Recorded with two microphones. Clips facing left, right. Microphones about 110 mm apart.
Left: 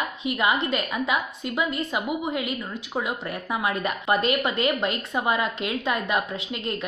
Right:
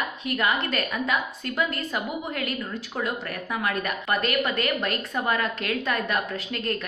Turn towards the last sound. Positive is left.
turn(degrees=20)  # may be behind; listen again after turning